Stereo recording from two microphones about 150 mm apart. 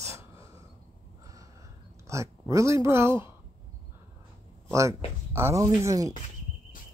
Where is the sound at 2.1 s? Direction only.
20° right (ahead or behind).